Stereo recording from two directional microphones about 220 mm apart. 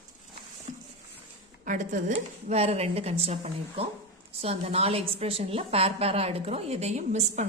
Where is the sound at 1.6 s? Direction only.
35° right (ahead or behind).